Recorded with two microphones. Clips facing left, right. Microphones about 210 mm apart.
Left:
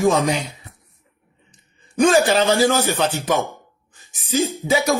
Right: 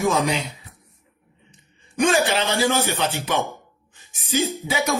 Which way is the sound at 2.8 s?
45° left (ahead or behind).